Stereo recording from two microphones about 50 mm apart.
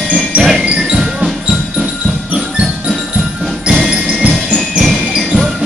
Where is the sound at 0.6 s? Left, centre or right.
Centre.